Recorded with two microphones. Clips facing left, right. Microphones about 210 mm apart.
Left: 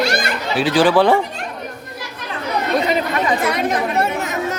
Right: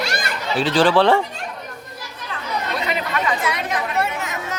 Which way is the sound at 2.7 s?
40° left (ahead or behind).